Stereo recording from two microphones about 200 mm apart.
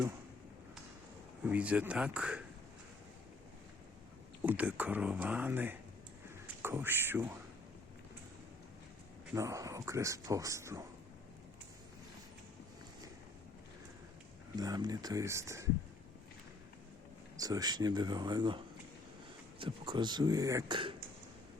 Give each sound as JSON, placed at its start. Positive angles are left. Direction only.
{"t": 1.5, "sound": "speech", "side_deg": -5}
{"t": 4.4, "sound": "a man's voice", "side_deg": -10}
{"t": 9.3, "sound": "speech", "side_deg": -15}
{"t": 14.5, "sound": "speech", "side_deg": -20}
{"t": 17.3, "sound": "speech", "side_deg": -20}